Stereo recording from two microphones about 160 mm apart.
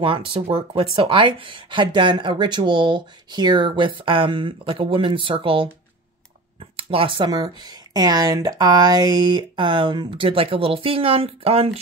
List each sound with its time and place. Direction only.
0.0 s speech: 30° right (ahead or behind)